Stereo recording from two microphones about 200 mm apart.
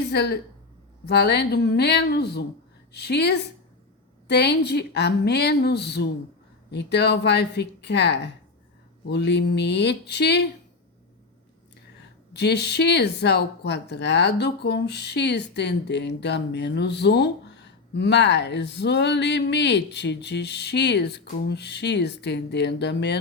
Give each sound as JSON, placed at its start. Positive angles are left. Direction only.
{"t": 0.1, "sound": "a woman's voice", "side_deg": 55}
{"t": 12.3, "sound": "a woman's voice", "side_deg": 55}